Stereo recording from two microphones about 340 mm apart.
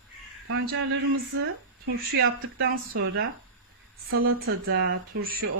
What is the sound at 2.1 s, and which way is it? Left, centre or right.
Speech, right.